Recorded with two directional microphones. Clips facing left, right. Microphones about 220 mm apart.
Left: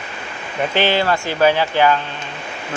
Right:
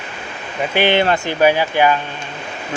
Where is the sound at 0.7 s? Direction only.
20° right (ahead or behind).